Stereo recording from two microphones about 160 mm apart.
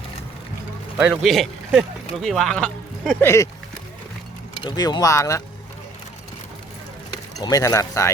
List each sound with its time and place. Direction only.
1.1 s speech: centre (ahead or behind)
3.2 s speech: 20° left (ahead or behind)
4.5 s speech: 25° left (ahead or behind)
7.4 s speech: 20° left (ahead or behind)